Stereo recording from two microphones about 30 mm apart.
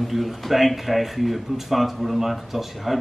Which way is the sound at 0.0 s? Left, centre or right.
Centre.